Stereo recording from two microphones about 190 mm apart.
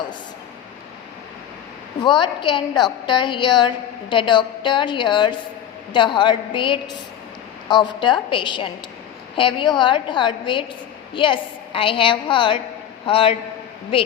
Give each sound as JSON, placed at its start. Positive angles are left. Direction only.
{"t": 2.0, "sound": "a woman's voice", "side_deg": 25}